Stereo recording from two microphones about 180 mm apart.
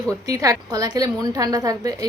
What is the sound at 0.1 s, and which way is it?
A woman's voice, 20° right (ahead or behind).